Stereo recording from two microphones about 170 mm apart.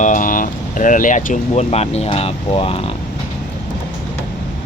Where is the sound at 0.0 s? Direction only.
50° left (ahead or behind); by 2.9 s 35° left (ahead or behind).